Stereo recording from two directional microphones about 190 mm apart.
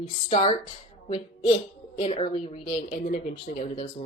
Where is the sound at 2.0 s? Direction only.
30° left (ahead or behind).